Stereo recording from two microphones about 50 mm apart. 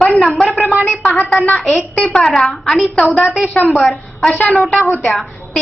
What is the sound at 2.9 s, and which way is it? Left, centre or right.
Speech, left.